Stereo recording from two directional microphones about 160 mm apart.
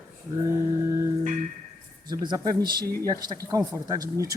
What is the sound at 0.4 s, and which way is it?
Mantra, 20° right (ahead or behind).